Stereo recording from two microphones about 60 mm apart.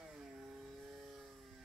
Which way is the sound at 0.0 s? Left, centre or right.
Centre.